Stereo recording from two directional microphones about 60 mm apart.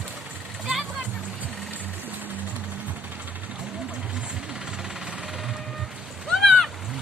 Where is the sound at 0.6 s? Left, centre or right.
Centre.